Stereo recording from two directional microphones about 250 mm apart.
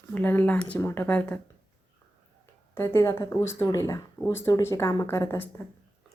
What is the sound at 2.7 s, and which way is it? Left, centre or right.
Speech, centre.